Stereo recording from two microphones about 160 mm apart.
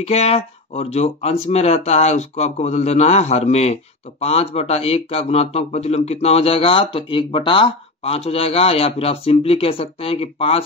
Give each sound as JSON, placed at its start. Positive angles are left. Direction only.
{"t": 0.0, "sound": "speech", "side_deg": 40}